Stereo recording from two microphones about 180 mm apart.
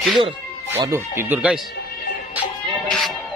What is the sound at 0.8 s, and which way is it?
Speech, 15° right (ahead or behind).